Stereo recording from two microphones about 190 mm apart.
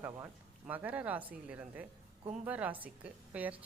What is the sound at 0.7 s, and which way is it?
A woman's voice, 10° right (ahead or behind).